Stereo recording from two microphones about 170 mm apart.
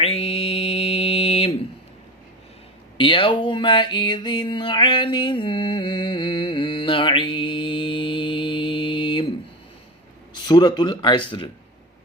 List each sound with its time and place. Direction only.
0.0 s mantra: 35° left (ahead or behind)
3.0 s a sound: 30° left (ahead or behind)
10.3 s speech: 25° left (ahead or behind)